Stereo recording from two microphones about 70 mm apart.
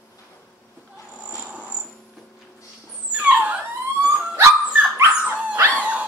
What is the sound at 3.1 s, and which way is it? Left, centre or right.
Dog, centre.